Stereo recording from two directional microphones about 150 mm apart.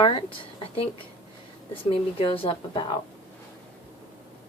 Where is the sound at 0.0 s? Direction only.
35° left (ahead or behind).